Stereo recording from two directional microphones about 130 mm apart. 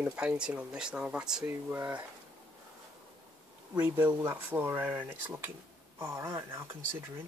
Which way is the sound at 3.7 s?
10° right (ahead or behind).